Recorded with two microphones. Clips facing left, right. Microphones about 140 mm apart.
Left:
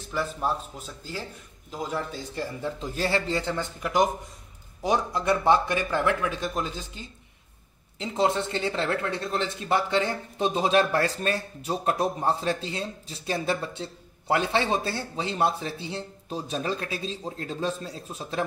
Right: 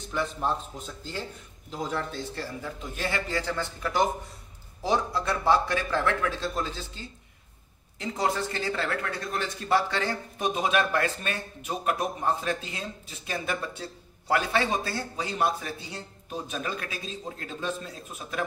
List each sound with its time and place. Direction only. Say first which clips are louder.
0.0 s a man's voice: left 1 dB; 5° left (ahead or behind)
2.6 s a man's voice: left 7 dB; 35° left (ahead or behind)